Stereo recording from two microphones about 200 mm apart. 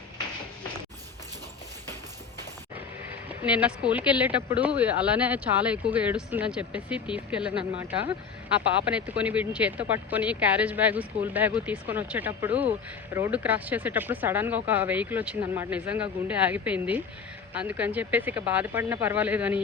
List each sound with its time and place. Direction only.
3.4 s speech: 5° right (ahead or behind)
8.8 s speech: 5° right (ahead or behind)